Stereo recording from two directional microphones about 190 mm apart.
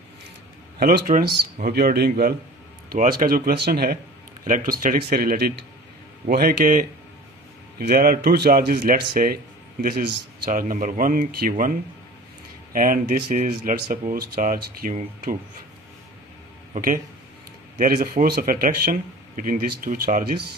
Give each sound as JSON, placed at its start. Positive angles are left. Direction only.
{"t": 0.7, "sound": "speech", "side_deg": -50}
{"t": 7.9, "sound": "speech", "side_deg": -50}
{"t": 12.7, "sound": "speech", "side_deg": -45}
{"t": 16.7, "sound": "speech", "side_deg": -45}